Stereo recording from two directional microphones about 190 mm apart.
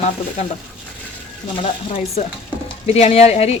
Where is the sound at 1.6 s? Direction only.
35° left (ahead or behind).